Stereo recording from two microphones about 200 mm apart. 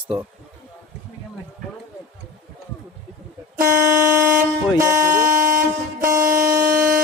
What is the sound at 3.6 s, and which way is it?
Air horn, 45° right (ahead or behind).